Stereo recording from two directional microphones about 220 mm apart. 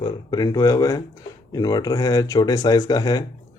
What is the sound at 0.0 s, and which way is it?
Speech, 20° left (ahead or behind).